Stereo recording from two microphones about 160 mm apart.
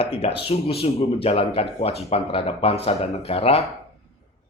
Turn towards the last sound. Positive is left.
turn(degrees=40)  # may be behind; listen again after turning